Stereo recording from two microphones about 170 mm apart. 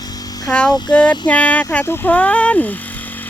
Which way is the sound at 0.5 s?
5° left (ahead or behind).